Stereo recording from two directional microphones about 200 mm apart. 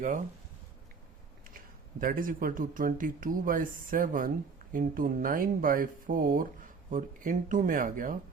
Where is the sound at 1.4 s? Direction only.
45° right (ahead or behind).